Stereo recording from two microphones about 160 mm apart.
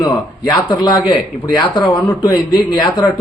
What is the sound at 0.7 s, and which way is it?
Speech, 30° left (ahead or behind).